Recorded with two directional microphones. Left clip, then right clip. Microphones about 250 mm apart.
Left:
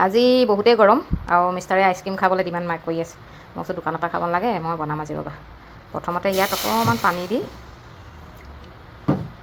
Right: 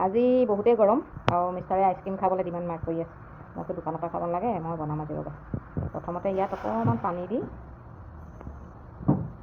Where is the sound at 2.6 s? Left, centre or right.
Left.